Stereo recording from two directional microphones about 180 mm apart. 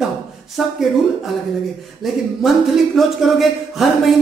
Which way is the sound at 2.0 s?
Centre (ahead or behind).